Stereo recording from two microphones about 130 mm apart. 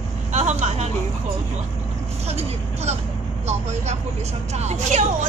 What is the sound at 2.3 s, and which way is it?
Speech, 55° right (ahead or behind).